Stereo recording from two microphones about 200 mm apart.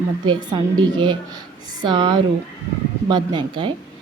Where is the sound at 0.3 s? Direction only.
20° right (ahead or behind).